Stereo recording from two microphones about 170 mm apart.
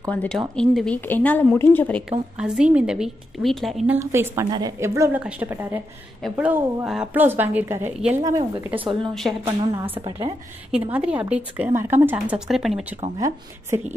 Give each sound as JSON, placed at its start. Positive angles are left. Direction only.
{"t": 0.1, "sound": "speech", "side_deg": 10}
{"t": 2.0, "sound": "a woman's voice", "side_deg": -5}
{"t": 3.9, "sound": "a woman's voice", "side_deg": -15}
{"t": 8.2, "sound": "a woman's voice", "side_deg": -20}
{"t": 9.3, "sound": "a woman's voice", "side_deg": -5}
{"t": 9.7, "sound": "a woman's voice", "side_deg": -20}
{"t": 10.7, "sound": "a woman's voice", "side_deg": -5}
{"t": 13.2, "sound": "a woman's voice", "side_deg": -15}